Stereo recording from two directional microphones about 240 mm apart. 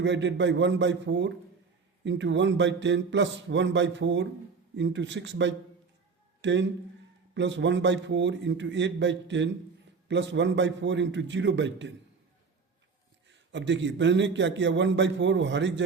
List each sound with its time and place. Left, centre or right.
0.0 s a man's voice: right
13.2 s a man's voice: right